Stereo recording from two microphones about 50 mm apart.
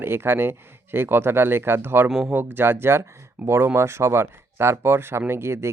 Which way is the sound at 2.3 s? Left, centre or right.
Right.